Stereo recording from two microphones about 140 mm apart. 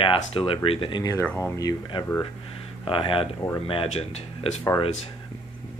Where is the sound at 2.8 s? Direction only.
40° left (ahead or behind).